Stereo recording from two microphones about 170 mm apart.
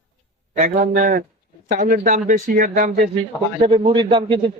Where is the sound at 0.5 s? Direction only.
55° right (ahead or behind).